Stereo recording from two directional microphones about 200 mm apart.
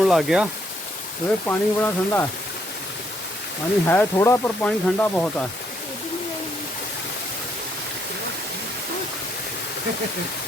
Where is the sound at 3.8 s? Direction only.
10° left (ahead or behind).